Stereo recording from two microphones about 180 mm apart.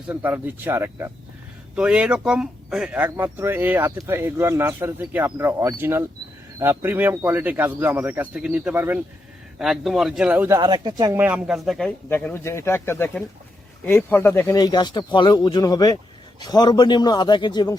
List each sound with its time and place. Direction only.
0.1 s speech: 10° right (ahead or behind)
9.6 s speech: centre (ahead or behind)
10.6 s speech: 25° right (ahead or behind)
11.2 s speech: 5° right (ahead or behind); by 17.7 s 25° left (ahead or behind)